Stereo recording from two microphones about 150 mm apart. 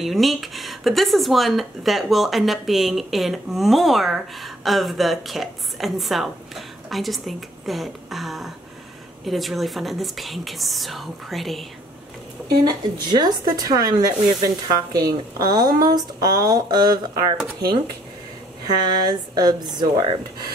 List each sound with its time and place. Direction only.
0.0 s speech: centre (ahead or behind)
12.6 s speech: 30° right (ahead or behind)
18.9 s speech: 25° right (ahead or behind)